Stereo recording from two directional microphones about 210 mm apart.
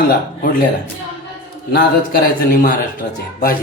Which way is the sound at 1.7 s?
45° left (ahead or behind).